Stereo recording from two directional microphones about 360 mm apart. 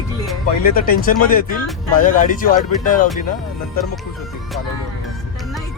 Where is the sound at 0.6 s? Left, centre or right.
Left.